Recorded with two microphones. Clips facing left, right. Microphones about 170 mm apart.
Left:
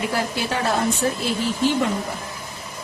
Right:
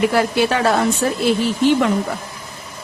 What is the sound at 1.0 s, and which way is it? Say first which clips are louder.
Speech: right 3 dB; 90° right.